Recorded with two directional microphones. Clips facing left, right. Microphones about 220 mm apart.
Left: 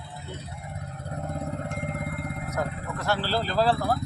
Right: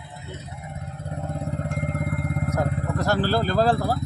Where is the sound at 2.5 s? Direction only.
40° right (ahead or behind).